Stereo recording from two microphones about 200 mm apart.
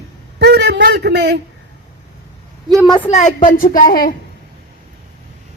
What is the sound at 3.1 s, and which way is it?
A woman's voice, 35° left (ahead or behind).